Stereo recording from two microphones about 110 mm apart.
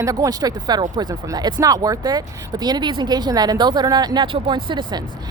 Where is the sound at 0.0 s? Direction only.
30° right (ahead or behind).